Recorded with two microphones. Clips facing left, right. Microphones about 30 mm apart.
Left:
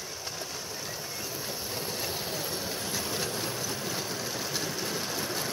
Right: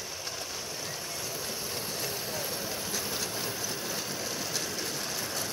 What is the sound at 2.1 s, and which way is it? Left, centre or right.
Vehicle, centre.